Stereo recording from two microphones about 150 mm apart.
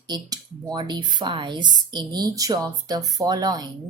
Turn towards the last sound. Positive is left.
turn(degrees=-25)  # may be behind; listen again after turning